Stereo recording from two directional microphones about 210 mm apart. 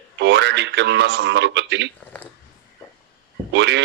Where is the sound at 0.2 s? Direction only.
55° right (ahead or behind).